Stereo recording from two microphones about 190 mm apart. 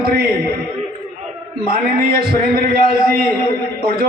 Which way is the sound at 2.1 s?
55° right (ahead or behind).